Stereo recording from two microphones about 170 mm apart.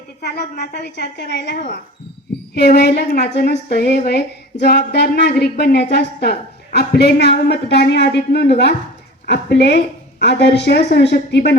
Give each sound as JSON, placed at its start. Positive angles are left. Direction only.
{"t": 0.2, "sound": "a woman's voice", "side_deg": 70}
{"t": 0.6, "sound": "speech", "side_deg": 85}
{"t": 2.6, "sound": "a woman's voice", "side_deg": 70}
{"t": 6.7, "sound": "speech", "side_deg": 75}